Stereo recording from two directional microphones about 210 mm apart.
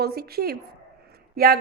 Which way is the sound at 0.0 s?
50° right (ahead or behind).